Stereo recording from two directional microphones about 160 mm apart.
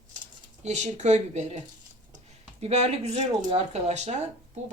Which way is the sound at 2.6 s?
45° right (ahead or behind).